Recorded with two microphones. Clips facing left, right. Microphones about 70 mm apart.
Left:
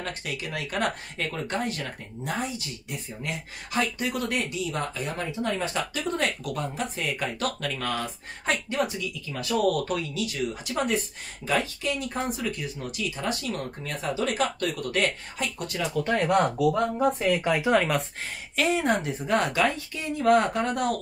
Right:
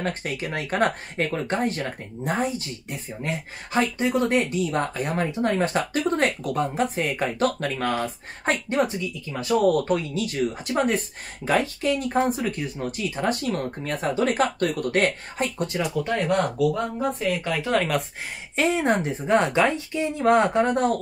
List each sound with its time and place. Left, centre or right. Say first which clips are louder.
0.0 s speech: right 5 dB; right
15.3 s speech: right 5 dB; right
15.8 s speech: even; centre
16.2 s speech: even; centre
18.6 s a woman's voice: right 3 dB; right